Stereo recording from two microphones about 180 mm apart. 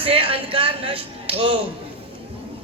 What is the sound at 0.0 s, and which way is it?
Music, 30° right (ahead or behind).